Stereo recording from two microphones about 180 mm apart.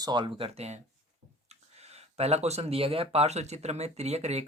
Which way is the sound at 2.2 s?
35° right (ahead or behind).